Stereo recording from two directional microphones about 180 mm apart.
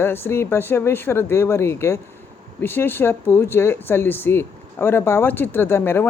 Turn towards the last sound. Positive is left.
turn(degrees=10)  # may be behind; listen again after turning